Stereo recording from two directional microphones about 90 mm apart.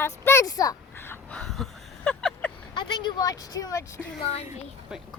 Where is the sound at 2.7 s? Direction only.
60° left (ahead or behind); by 4.0 s 35° left (ahead or behind).